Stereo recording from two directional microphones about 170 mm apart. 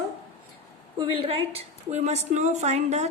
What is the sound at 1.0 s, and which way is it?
A woman's voice, 35° right (ahead or behind).